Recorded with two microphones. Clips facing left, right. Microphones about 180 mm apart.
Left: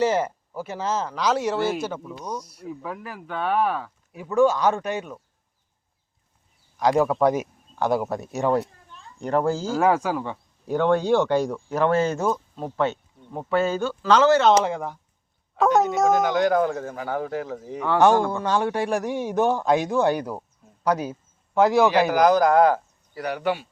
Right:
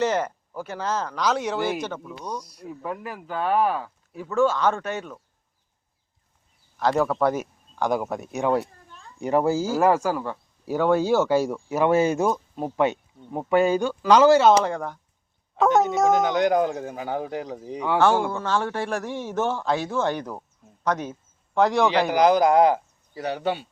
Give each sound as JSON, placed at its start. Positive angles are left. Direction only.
{"t": 0.0, "sound": "speech", "side_deg": 10}
{"t": 2.4, "sound": "speech", "side_deg": -15}
{"t": 2.6, "sound": "speech", "side_deg": 0}
{"t": 4.1, "sound": "speech", "side_deg": 15}
{"t": 6.7, "sound": "a man's voice", "side_deg": 10}
{"t": 14.6, "sound": "speech", "side_deg": 5}
{"t": 16.0, "sound": "speech", "side_deg": -20}
{"t": 18.3, "sound": "a man's voice", "side_deg": 15}
{"t": 22.1, "sound": "speech", "side_deg": -20}